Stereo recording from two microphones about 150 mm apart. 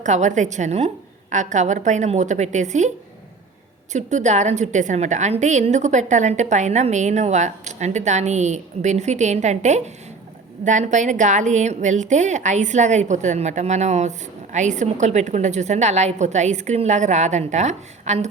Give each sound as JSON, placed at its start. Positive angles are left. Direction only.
{"t": 0.0, "sound": "a woman's voice", "side_deg": -55}
{"t": 3.9, "sound": "a woman's voice", "side_deg": -50}